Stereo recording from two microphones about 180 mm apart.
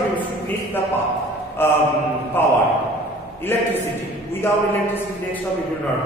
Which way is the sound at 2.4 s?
10° left (ahead or behind).